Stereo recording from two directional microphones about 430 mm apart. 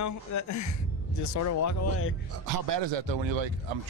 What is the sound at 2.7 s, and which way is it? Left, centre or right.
Speech, right.